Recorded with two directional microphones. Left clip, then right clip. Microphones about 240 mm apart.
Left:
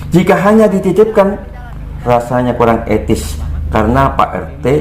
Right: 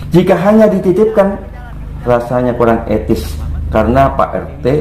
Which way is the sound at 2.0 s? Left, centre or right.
Left.